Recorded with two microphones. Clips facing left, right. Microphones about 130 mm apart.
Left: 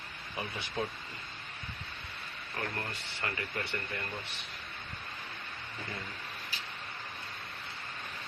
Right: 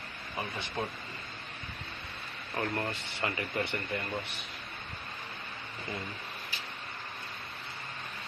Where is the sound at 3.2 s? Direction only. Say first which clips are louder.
Right 4 dB; 20° right (ahead or behind).